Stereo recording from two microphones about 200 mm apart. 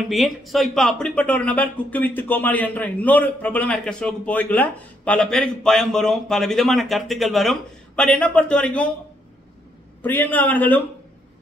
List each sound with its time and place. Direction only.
0.1 s speech: centre (ahead or behind)
10.0 s a man's voice: 10° left (ahead or behind)